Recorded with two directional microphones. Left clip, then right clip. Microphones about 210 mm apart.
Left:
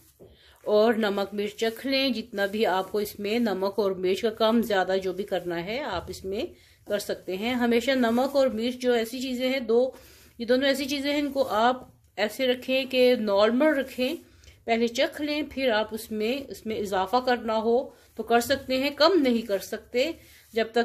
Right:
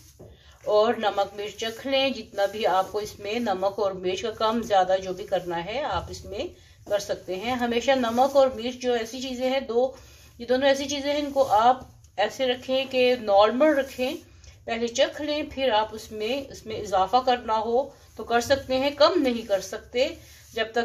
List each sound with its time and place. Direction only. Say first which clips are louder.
0.7 s speech: right 1 dB; 50° left (ahead or behind)